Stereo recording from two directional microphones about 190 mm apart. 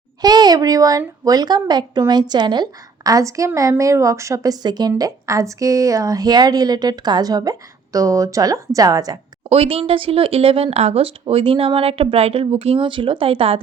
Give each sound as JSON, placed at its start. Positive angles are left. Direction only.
{"t": 0.2, "sound": "a woman's voice", "side_deg": -20}
{"t": 9.5, "sound": "a woman's voice", "side_deg": -30}